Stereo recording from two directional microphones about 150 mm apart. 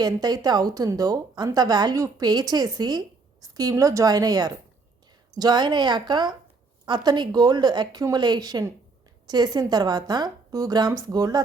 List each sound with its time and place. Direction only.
0.0 s a woman's voice: 25° right (ahead or behind)